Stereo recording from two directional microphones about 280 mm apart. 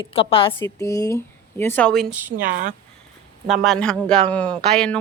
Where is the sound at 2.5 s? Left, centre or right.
Right.